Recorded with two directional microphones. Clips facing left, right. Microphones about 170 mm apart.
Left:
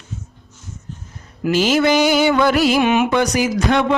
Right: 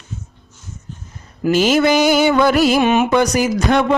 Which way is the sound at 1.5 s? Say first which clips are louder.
Right 2 dB; 50° right (ahead or behind).